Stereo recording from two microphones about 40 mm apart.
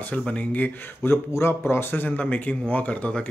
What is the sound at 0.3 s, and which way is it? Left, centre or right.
Speech, left.